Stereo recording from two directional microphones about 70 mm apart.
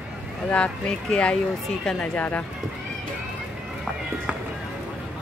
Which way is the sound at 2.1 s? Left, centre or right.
Left.